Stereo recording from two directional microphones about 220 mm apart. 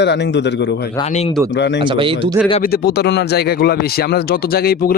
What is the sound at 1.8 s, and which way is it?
Speech, 25° right (ahead or behind).